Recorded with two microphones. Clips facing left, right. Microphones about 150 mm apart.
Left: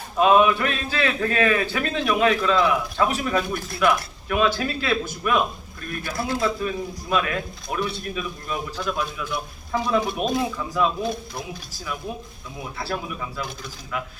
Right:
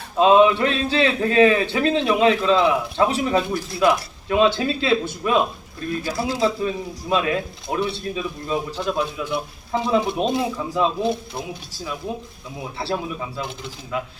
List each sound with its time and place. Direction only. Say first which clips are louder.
0.2 s a man's voice: right 3 dB; 25° right (ahead or behind)
6.1 s a man's voice: left 3 dB; 55° left (ahead or behind)
6.4 s a man's voice: right 3 dB; 25° right (ahead or behind)
12.8 s a man's voice: right 4 dB; 25° right (ahead or behind)